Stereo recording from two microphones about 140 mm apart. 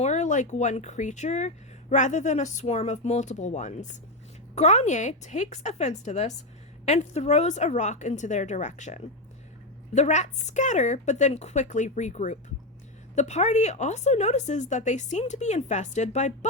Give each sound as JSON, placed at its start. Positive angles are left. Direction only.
{"t": 0.0, "sound": "speech", "side_deg": 60}